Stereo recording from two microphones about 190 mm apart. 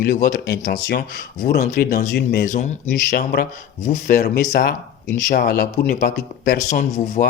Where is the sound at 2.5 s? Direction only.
40° left (ahead or behind).